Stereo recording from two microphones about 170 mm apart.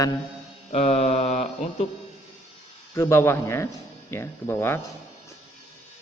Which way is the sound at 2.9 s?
15° left (ahead or behind).